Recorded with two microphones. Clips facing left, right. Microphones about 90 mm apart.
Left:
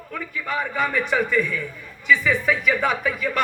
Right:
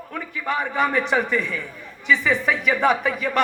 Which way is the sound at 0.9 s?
30° right (ahead or behind).